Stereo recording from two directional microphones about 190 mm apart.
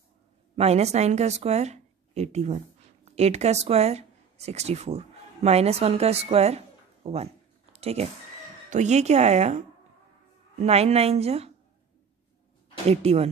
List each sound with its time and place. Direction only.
0.6 s speech: 35° right (ahead or behind)
10.6 s speech: 35° right (ahead or behind)
12.9 s speech: 35° right (ahead or behind)